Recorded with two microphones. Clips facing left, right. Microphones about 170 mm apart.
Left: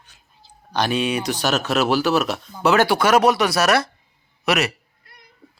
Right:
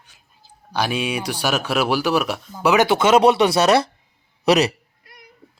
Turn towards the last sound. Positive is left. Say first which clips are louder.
# right 5 dB
turn(degrees=-35)  # may be behind; listen again after turning